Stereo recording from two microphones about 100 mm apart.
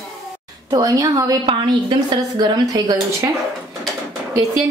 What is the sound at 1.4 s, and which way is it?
A woman's voice, 50° right (ahead or behind).